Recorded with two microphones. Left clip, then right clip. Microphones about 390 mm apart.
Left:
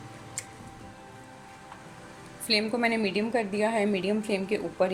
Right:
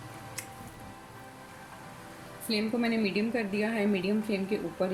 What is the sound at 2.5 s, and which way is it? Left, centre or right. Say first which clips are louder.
A woman's voice: left 5 dB; centre.